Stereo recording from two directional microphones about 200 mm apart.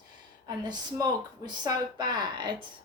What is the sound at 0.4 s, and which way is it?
Speech, 20° right (ahead or behind).